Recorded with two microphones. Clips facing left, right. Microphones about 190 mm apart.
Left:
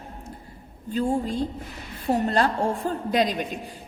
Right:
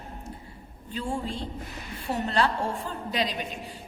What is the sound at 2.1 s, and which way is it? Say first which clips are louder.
A woman's voice: left 4 dB; 45° left (ahead or behind).